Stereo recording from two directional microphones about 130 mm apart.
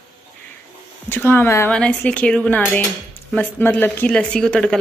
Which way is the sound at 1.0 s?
15° left (ahead or behind).